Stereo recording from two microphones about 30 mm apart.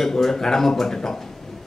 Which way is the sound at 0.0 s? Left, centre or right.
Centre.